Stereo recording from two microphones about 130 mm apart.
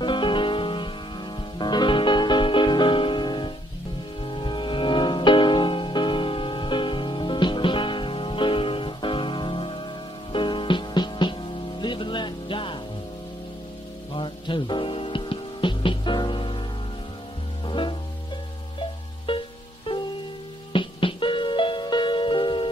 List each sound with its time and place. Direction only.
0.0 s music: 40° left (ahead or behind)
14.1 s music: 40° left (ahead or behind)
17.6 s music: 40° left (ahead or behind)
20.7 s music: 40° left (ahead or behind)